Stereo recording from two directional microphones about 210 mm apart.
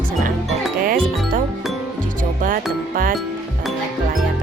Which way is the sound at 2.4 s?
40° right (ahead or behind).